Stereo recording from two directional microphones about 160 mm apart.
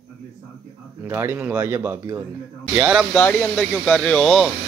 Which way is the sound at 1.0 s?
15° right (ahead or behind).